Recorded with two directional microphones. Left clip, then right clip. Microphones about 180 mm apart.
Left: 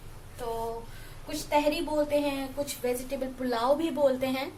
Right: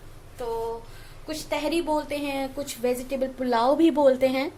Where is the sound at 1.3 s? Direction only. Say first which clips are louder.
Left 1 dB; 60° right (ahead or behind).